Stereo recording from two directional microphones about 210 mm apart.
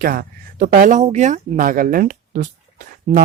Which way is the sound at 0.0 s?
45° right (ahead or behind).